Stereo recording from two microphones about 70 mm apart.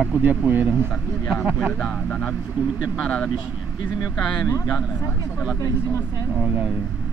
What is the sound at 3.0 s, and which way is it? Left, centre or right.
Speech, centre.